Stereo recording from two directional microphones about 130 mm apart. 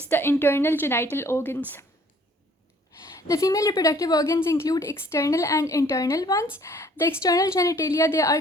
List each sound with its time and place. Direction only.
0.1 s a woman's voice: 15° left (ahead or behind)
3.0 s a woman's voice: 25° left (ahead or behind)